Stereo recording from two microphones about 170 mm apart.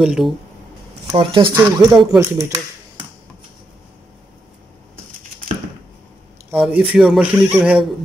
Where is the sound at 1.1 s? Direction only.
30° right (ahead or behind).